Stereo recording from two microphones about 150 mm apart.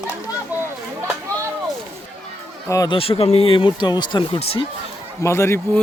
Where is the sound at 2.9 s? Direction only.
40° left (ahead or behind).